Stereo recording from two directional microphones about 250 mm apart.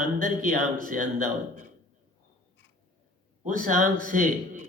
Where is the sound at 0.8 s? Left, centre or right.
Right.